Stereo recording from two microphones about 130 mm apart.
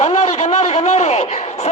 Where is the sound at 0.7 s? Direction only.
55° left (ahead or behind).